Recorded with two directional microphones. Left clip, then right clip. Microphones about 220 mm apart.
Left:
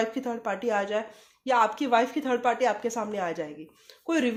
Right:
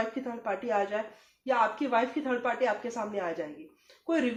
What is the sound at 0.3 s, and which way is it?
Speech, 50° left (ahead or behind).